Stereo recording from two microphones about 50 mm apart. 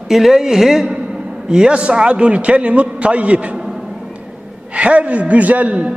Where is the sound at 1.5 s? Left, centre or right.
Centre.